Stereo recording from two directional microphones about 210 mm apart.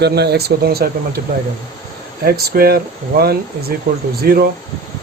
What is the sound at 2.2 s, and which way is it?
Speech, 45° right (ahead or behind).